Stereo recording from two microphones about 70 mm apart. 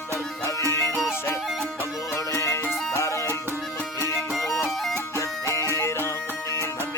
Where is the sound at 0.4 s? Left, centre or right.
Left.